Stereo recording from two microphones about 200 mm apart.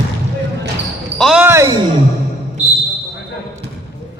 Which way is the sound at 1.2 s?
Centre (ahead or behind).